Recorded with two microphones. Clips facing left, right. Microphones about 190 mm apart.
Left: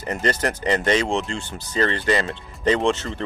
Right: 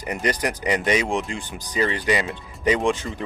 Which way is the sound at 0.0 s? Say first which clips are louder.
Left 1 dB; 15° right (ahead or behind).